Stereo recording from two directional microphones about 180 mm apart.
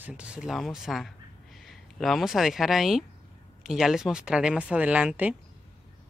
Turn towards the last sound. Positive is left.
turn(degrees=-10)  # may be behind; listen again after turning